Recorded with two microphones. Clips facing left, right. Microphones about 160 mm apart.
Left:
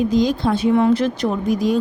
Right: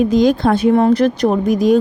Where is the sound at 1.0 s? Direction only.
60° right (ahead or behind).